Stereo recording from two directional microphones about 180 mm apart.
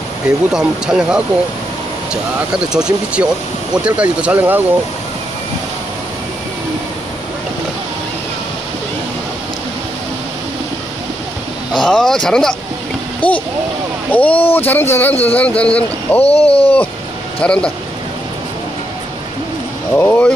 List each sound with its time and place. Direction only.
0.5 s speech: 5° right (ahead or behind)
2.7 s speech: 5° right (ahead or behind)
11.8 s speech: 5° left (ahead or behind)
16.2 s speech: 35° left (ahead or behind)
17.4 s speech: 5° left (ahead or behind)
19.9 s speech: 10° left (ahead or behind)